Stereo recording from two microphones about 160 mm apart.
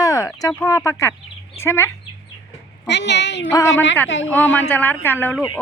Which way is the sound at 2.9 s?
90° left.